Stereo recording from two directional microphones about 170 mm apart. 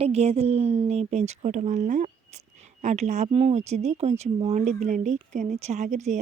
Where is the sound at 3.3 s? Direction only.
35° right (ahead or behind).